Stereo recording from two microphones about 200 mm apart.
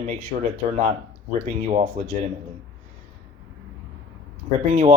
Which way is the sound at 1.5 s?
35° right (ahead or behind).